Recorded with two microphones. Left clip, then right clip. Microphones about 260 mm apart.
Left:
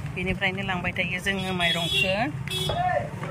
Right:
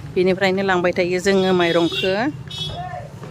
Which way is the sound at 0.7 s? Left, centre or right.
Centre.